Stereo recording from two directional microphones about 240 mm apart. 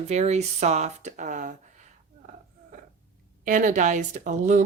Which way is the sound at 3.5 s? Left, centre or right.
Right.